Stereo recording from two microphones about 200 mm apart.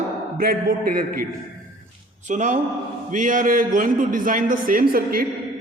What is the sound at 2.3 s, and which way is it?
A man's voice, 35° right (ahead or behind).